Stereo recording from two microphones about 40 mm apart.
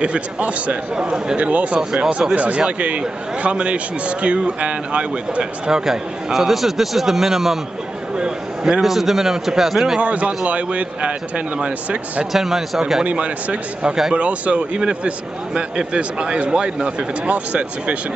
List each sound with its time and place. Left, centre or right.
0.0 s a man's voice: right
5.4 s speech: right
5.9 s a man's voice: centre
8.8 s a man's voice: centre
9.9 s a man's voice: right
12.3 s a man's voice: centre
13.0 s a man's voice: right